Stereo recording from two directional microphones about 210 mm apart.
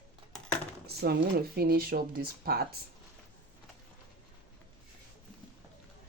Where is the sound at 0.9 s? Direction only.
50° right (ahead or behind).